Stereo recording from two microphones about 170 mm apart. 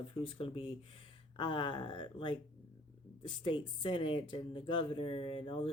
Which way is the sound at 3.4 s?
30° left (ahead or behind).